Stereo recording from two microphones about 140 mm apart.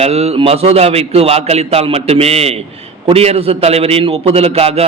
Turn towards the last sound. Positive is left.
turn(degrees=-45)  # may be behind; listen again after turning